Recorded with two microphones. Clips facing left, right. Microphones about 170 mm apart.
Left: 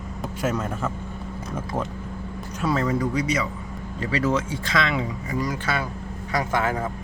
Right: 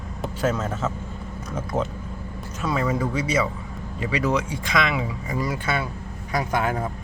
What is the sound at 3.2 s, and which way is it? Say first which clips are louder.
Speech: right 1 dB; 30° right (ahead or behind).